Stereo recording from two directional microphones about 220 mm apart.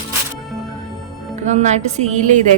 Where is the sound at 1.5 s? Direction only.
30° right (ahead or behind).